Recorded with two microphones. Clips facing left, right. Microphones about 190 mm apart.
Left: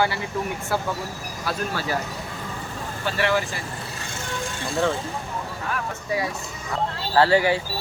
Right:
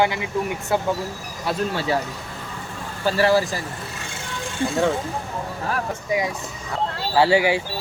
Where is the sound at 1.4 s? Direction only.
25° right (ahead or behind).